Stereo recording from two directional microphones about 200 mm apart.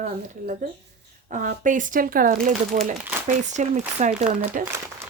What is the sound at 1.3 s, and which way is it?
Speech, 40° right (ahead or behind).